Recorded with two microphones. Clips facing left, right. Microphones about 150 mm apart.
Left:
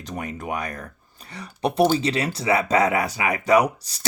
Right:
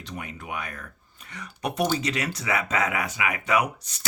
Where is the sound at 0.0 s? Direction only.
45° left (ahead or behind).